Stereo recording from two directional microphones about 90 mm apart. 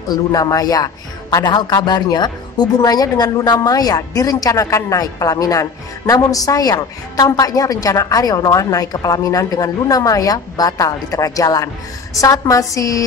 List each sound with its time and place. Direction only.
0.1 s a man's voice: 40° left (ahead or behind)